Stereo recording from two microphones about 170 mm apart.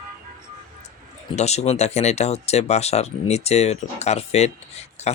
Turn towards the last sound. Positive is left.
turn(degrees=40)  # may be behind; listen again after turning